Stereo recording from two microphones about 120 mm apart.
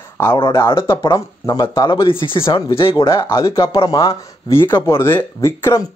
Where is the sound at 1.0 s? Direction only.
30° left (ahead or behind); by 3.0 s 45° left (ahead or behind).